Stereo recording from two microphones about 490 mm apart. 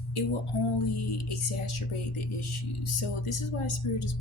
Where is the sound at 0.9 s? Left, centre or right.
Left.